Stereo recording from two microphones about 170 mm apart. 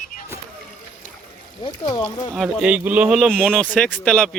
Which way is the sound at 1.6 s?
20° left (ahead or behind).